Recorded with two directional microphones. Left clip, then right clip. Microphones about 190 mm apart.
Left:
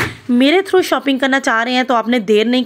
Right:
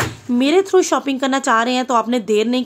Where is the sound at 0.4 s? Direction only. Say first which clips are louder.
Left 2 dB; 15° left (ahead or behind).